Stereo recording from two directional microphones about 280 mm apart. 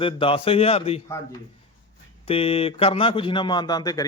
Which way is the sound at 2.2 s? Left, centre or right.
Centre.